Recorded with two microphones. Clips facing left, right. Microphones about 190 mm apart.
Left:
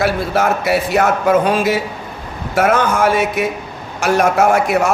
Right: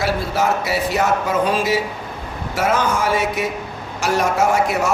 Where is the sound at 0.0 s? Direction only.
60° left (ahead or behind).